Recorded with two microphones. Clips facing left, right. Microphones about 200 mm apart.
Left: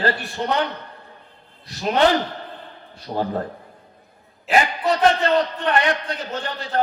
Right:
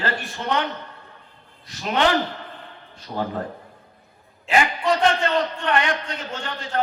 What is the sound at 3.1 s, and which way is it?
Speech, 40° left (ahead or behind).